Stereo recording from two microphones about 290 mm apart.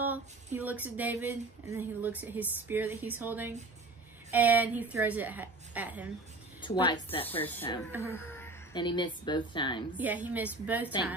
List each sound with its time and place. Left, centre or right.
0.0 s a woman's voice: centre
6.6 s speech: centre
7.2 s a woman's voice: centre
9.9 s a woman's voice: centre